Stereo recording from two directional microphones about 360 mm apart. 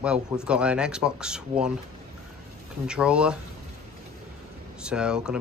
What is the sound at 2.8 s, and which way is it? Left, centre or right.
Speech, centre.